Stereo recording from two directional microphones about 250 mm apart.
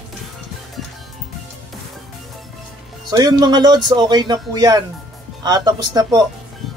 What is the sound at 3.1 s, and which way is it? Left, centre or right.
Speech, centre.